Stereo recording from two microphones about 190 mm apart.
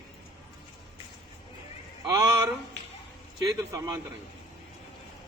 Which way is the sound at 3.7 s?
15° right (ahead or behind).